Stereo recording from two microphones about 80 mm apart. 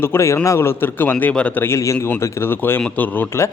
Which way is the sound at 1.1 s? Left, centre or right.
Centre.